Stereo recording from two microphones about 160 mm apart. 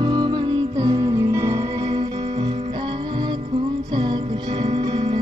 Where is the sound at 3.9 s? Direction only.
30° right (ahead or behind).